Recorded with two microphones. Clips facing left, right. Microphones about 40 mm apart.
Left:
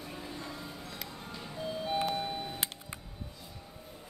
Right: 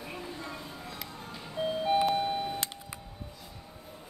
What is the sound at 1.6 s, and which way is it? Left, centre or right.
Ice cream truck, right.